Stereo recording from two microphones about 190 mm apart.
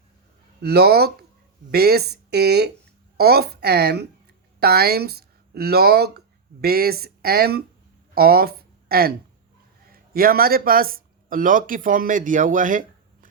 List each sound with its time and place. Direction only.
0.6 s a woman's voice: 60° right (ahead or behind)